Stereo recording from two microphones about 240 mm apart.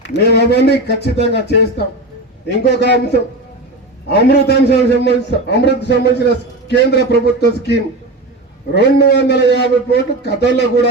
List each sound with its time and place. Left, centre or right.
0.0 s a man's voice: left